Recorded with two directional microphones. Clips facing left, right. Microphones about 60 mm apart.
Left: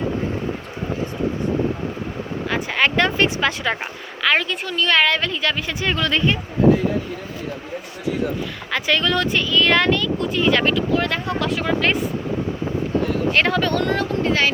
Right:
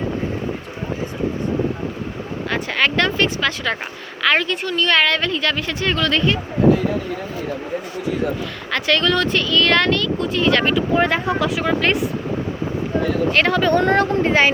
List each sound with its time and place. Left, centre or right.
2.5 s speech: centre
4.2 s speech: centre
8.7 s speech: centre
10.8 s speech: centre
13.3 s speech: centre
13.8 s a woman's voice: right